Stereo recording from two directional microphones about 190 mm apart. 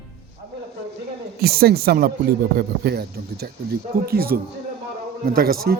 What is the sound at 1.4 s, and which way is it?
Speech, 55° right (ahead or behind).